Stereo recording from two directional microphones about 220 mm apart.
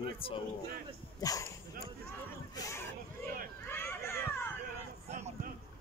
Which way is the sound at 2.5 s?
15° left (ahead or behind).